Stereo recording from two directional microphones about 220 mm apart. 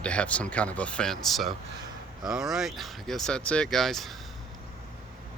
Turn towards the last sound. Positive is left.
turn(degrees=0)  # may be behind; listen again after turning